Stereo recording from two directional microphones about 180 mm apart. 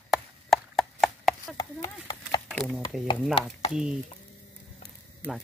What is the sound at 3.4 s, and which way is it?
Speech, 30° left (ahead or behind).